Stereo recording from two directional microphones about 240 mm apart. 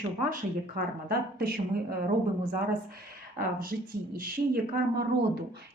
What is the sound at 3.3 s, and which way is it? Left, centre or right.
Speech, right.